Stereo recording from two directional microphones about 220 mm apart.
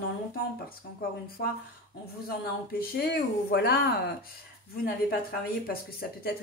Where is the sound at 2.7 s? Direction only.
45° left (ahead or behind).